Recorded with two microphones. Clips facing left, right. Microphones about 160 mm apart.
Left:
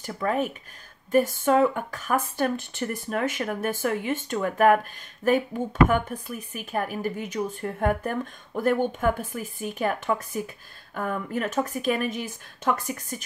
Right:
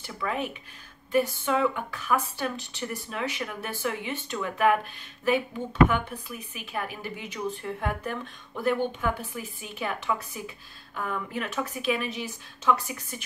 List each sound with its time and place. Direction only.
0.0 s speech: 45° left (ahead or behind)